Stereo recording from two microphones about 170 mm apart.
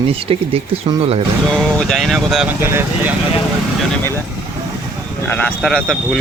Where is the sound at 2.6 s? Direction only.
15° right (ahead or behind).